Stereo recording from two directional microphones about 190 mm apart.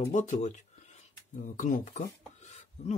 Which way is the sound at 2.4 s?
35° left (ahead or behind).